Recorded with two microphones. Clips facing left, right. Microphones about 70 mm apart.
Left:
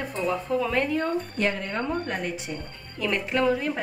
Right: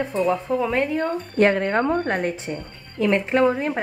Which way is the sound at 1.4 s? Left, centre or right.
Right.